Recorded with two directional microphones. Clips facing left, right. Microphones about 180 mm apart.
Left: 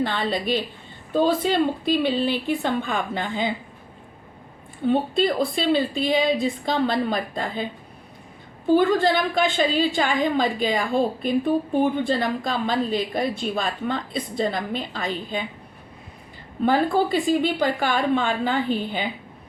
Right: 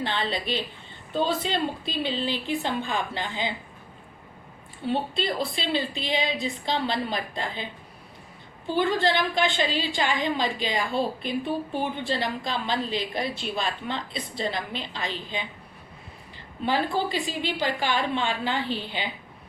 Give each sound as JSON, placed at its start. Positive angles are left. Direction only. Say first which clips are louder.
{"t": 0.0, "sound": "a woman's voice", "louder": "left 5 dB", "side_deg": 50}
{"t": 4.9, "sound": "a woman's voice", "louder": "left 6 dB", "side_deg": 50}
{"t": 8.7, "sound": "a woman's voice", "louder": "left 6 dB", "side_deg": 50}
{"t": 16.6, "sound": "a woman's voice", "louder": "left 6 dB", "side_deg": 50}